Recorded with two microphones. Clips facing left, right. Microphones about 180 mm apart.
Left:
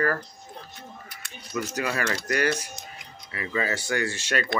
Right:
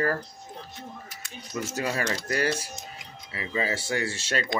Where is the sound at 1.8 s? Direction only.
25° right (ahead or behind).